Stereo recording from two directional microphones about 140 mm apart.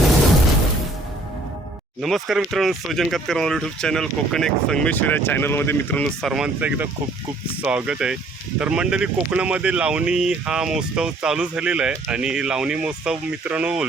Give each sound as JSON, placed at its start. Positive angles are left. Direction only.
{"t": 2.0, "sound": "speech", "side_deg": 0}
{"t": 6.3, "sound": "speech", "side_deg": -5}